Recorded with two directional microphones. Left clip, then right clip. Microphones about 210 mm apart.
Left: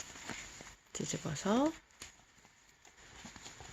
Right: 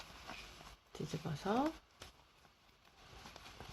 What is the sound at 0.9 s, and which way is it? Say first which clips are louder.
Speech: left 5 dB; 35° left (ahead or behind).